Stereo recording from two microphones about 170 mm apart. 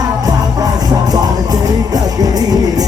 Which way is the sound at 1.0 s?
20° right (ahead or behind).